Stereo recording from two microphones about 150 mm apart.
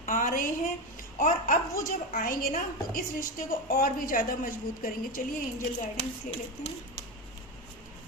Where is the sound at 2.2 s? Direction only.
70° left (ahead or behind).